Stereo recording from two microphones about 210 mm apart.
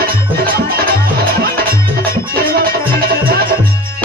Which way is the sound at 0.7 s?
45° right (ahead or behind).